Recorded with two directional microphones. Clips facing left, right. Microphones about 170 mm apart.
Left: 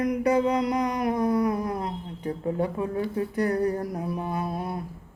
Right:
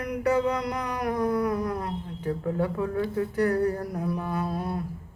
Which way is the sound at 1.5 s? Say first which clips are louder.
Left 1 dB; 30° left (ahead or behind).